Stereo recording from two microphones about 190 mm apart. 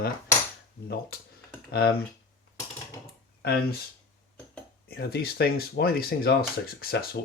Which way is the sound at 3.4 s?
55° left (ahead or behind).